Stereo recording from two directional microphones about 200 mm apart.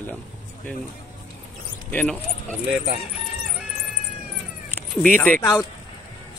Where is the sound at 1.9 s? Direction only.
5° left (ahead or behind).